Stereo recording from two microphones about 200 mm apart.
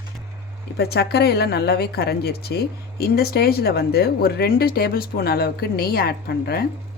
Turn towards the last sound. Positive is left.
turn(degrees=50)  # may be behind; listen again after turning